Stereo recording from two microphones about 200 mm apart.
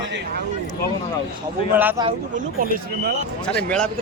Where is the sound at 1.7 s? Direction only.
10° right (ahead or behind).